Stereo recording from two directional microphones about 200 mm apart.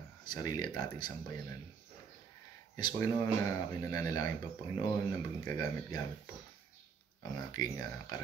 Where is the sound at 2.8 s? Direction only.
15° left (ahead or behind).